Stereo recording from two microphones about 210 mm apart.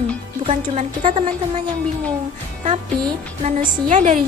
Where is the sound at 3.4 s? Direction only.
35° right (ahead or behind).